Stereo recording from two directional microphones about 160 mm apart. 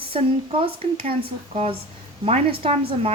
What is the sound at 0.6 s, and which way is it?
A woman's voice, 35° right (ahead or behind).